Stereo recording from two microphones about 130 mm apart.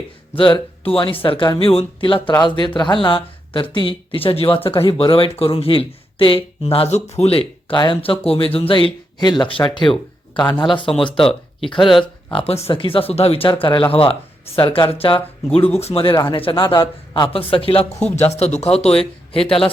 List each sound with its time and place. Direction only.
0.3 s speech: 40° left (ahead or behind)
11.8 s speech: centre (ahead or behind)
12.3 s speech: 45° left (ahead or behind)